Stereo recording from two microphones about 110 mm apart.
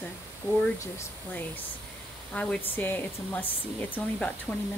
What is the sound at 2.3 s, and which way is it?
Speech, 10° left (ahead or behind).